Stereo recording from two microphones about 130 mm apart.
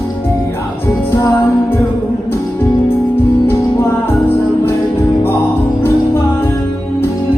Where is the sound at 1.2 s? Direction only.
20° left (ahead or behind).